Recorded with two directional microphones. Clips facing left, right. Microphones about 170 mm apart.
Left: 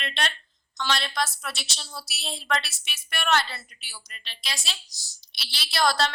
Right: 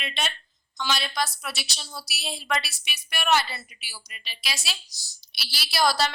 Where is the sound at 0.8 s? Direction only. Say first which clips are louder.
Even; 5° right (ahead or behind).